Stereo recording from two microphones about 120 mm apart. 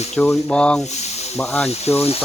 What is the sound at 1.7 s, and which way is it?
Speech, 60° left (ahead or behind).